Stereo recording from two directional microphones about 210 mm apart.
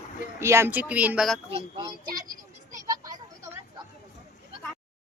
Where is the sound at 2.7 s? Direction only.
15° right (ahead or behind).